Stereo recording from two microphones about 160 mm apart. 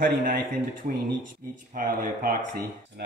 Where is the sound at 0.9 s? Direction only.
55° right (ahead or behind).